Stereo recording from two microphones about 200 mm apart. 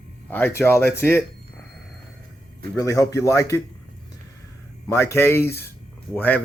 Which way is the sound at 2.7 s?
15° left (ahead or behind).